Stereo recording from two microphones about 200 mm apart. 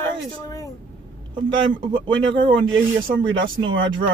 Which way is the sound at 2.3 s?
70° right (ahead or behind).